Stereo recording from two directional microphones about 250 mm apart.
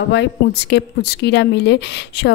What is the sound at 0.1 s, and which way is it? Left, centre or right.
A woman's voice, left.